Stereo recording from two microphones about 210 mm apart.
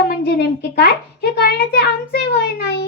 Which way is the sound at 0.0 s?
50° left (ahead or behind).